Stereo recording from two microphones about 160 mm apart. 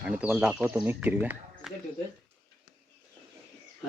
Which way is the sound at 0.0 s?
10° right (ahead or behind).